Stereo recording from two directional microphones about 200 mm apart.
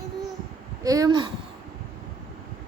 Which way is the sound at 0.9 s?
15° right (ahead or behind).